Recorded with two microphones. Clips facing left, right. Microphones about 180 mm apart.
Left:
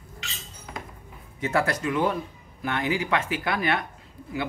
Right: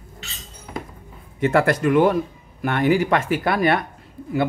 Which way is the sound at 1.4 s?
60° right (ahead or behind).